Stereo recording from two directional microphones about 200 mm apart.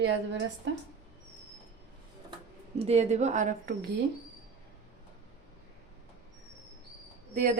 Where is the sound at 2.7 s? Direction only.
30° right (ahead or behind).